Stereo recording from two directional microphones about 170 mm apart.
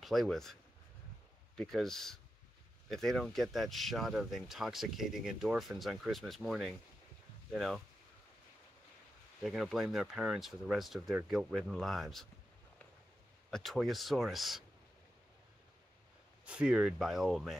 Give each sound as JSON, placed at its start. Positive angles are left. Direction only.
{"t": 0.0, "sound": "speech", "side_deg": 0}
{"t": 1.6, "sound": "speech", "side_deg": 0}
{"t": 9.4, "sound": "speech", "side_deg": -5}
{"t": 13.5, "sound": "speech", "side_deg": 0}
{"t": 16.4, "sound": "speech", "side_deg": -5}